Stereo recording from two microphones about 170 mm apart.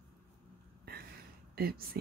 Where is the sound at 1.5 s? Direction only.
65° right (ahead or behind).